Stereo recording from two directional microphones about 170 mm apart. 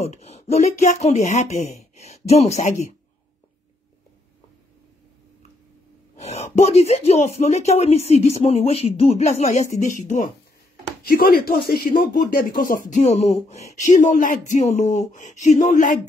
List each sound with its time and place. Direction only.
0.0 s speech: 40° left (ahead or behind)
6.2 s speech: 40° left (ahead or behind)
11.1 s speech: 60° left (ahead or behind)